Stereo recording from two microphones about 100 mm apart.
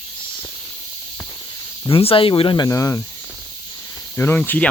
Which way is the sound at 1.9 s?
70° left (ahead or behind).